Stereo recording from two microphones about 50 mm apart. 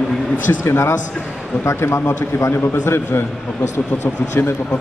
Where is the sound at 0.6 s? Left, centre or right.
Left.